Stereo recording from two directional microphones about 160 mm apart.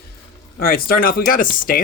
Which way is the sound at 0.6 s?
65° left (ahead or behind).